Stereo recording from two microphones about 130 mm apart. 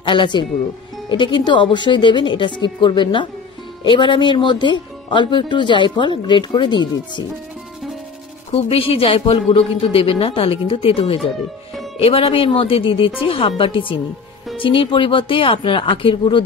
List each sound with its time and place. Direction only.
0.0 s speech: 40° left (ahead or behind)
8.5 s speech: 50° left (ahead or behind)